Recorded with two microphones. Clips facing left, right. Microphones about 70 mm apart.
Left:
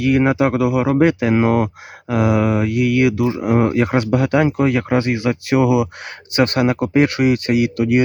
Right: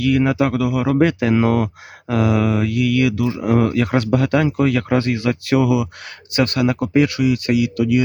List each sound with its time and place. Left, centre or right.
0.0 s speech: left